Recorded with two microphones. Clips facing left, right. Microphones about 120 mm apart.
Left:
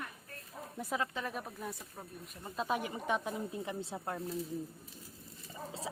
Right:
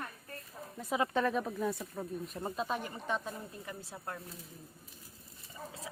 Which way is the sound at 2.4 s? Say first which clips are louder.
Right 8 dB; 65° right (ahead or behind).